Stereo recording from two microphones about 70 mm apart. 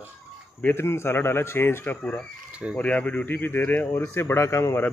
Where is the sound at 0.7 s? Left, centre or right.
Left.